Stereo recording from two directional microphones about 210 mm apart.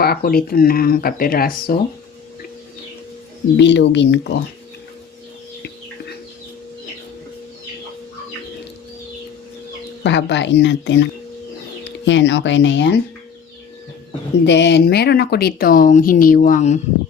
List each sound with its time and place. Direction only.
0.0 s speech: 45° left (ahead or behind)
3.6 s speech: 55° left (ahead or behind)
10.0 s speech: 55° left (ahead or behind)
14.4 s speech: 55° left (ahead or behind); by 16.8 s 35° left (ahead or behind)